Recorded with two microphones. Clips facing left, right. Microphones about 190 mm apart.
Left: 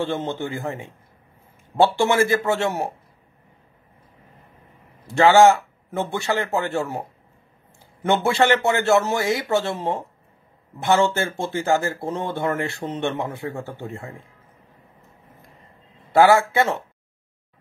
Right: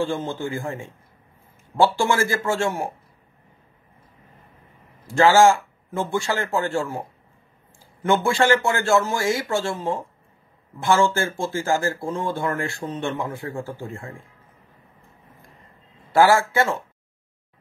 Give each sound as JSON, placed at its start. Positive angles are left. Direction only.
{"t": 0.0, "sound": "speech", "side_deg": 20}
{"t": 5.2, "sound": "speech", "side_deg": 20}
{"t": 8.2, "sound": "speech", "side_deg": 20}
{"t": 16.1, "sound": "speech", "side_deg": 20}